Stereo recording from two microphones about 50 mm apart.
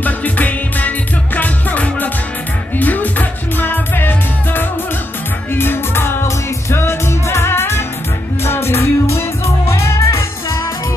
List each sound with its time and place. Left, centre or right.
0.0 s music: left
9.7 s music: left